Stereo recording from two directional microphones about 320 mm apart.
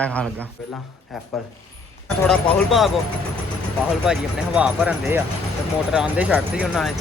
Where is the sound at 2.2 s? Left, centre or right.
Centre.